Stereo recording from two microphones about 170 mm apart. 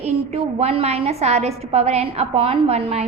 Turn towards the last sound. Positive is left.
turn(degrees=-35)  # may be behind; listen again after turning